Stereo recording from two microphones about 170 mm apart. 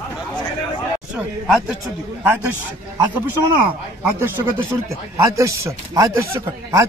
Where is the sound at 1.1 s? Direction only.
5° right (ahead or behind).